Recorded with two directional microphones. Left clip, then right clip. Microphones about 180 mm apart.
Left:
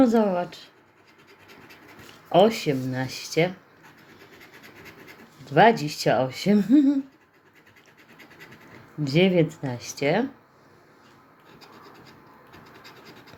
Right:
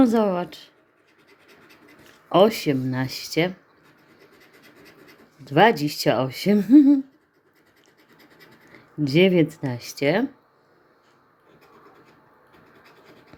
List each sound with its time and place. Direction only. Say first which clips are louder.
0.0 s speech: right 1 dB; 35° right (ahead or behind)
2.3 s speech: right 1 dB; 35° right (ahead or behind)
5.5 s speech: right 1 dB; 35° right (ahead or behind)
9.0 s speech: right 3 dB; 35° right (ahead or behind)